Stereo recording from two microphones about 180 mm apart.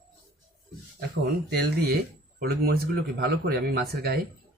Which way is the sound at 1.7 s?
60° right (ahead or behind).